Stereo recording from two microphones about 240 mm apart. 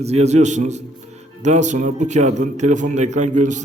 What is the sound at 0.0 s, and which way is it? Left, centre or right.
A man's voice, right.